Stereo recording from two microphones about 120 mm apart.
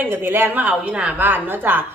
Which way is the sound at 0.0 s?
15° right (ahead or behind).